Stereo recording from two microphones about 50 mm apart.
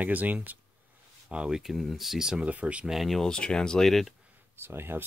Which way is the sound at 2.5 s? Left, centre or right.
Right.